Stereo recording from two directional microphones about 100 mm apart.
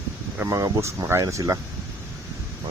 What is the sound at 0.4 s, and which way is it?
Speech, 30° right (ahead or behind).